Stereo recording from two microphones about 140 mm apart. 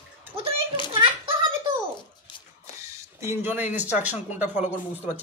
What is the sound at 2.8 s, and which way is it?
Speech, 20° right (ahead or behind).